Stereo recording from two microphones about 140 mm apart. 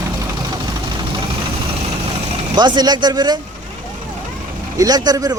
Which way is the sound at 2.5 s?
30° right (ahead or behind).